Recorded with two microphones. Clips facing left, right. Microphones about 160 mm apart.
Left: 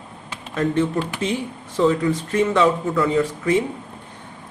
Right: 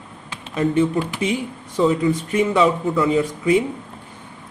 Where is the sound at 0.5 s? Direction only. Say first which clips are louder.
Right 2 dB; 10° right (ahead or behind).